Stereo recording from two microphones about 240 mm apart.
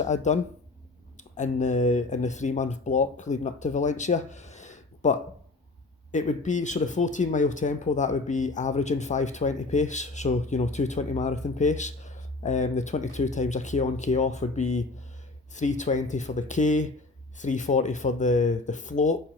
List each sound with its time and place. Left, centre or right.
0.0 s speech: left
1.4 s speech: left